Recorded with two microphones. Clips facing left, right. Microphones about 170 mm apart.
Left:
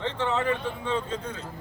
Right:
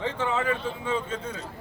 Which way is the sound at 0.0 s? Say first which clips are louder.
Even; 10° right (ahead or behind).